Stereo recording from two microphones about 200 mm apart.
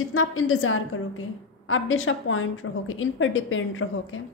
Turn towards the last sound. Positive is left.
turn(degrees=80)